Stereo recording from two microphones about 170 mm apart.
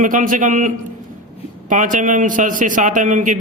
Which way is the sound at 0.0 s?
50° right (ahead or behind).